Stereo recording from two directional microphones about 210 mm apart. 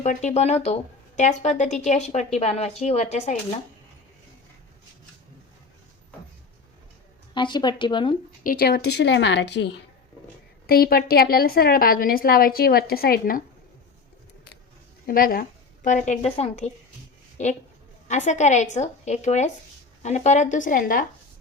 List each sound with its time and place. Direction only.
0.0 s speech: 35° left (ahead or behind)
7.3 s speech: 20° left (ahead or behind)
8.4 s a woman's voice: 45° left (ahead or behind)
10.7 s a woman's voice: 45° left (ahead or behind)
15.0 s a woman's voice: 45° left (ahead or behind)